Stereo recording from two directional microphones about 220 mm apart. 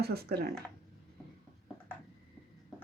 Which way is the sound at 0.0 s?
45° right (ahead or behind).